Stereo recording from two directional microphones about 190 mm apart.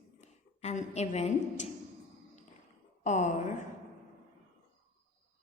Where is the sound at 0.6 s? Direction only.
35° left (ahead or behind).